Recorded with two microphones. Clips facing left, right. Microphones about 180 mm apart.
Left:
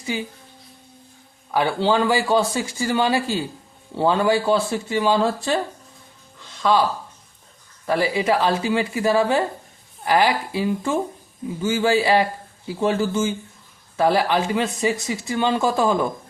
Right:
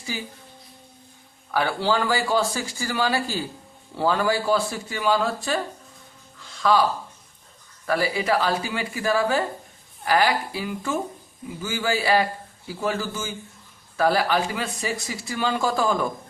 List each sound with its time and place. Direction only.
1.5 s speech: 20° left (ahead or behind)
6.6 s speech: 20° left (ahead or behind)
7.9 s speech: 25° left (ahead or behind)